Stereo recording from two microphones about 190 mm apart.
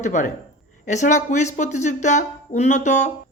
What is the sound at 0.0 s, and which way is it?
Speech, 40° left (ahead or behind).